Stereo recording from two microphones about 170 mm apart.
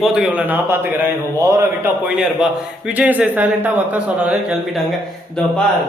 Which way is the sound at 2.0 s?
5° right (ahead or behind).